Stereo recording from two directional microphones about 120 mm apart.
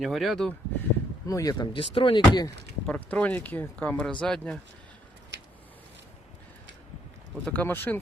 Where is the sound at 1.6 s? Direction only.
45° left (ahead or behind).